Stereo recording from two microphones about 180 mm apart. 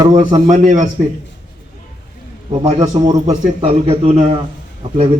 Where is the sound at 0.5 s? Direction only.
40° right (ahead or behind).